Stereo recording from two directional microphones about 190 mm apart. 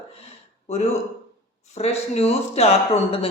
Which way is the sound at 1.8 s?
35° left (ahead or behind).